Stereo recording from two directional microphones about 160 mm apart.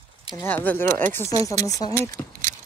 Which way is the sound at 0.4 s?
15° left (ahead or behind).